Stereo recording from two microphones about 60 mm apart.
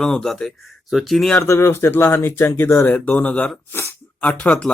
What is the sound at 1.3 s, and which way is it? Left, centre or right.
Speech, left.